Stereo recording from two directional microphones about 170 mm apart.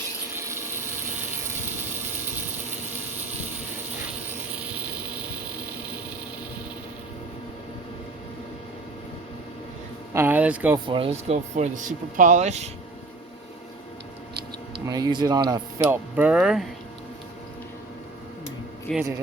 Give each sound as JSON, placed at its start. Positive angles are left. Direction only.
{"t": 0.3, "sound": "a sound", "side_deg": -15}
{"t": 10.2, "sound": "speech", "side_deg": -10}
{"t": 10.8, "sound": "speech", "side_deg": -30}
{"t": 14.8, "sound": "speech", "side_deg": -20}
{"t": 15.9, "sound": "speech", "side_deg": -10}
{"t": 18.9, "sound": "speech", "side_deg": 5}